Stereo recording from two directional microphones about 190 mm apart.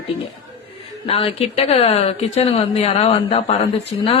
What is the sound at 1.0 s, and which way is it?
Speech, 30° left (ahead or behind).